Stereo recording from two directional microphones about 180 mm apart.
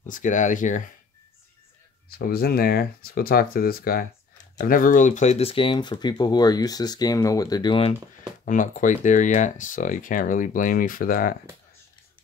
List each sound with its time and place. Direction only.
0.0 s speech: 45° left (ahead or behind)
2.0 s speech: 55° left (ahead or behind); by 7.9 s 25° left (ahead or behind)
8.5 s speech: 45° left (ahead or behind)